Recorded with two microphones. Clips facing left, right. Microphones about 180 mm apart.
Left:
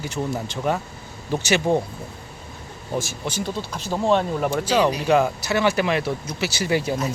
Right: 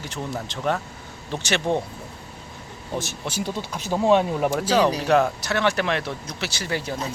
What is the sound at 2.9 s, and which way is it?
Speech, centre (ahead or behind).